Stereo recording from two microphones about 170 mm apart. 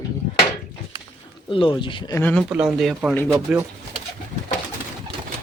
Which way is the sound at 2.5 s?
5° right (ahead or behind).